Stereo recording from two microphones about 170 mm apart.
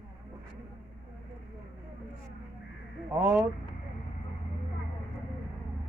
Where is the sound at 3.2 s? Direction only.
15° right (ahead or behind).